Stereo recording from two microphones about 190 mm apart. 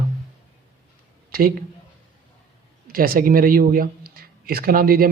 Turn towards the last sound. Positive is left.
turn(degrees=-50)  # may be behind; listen again after turning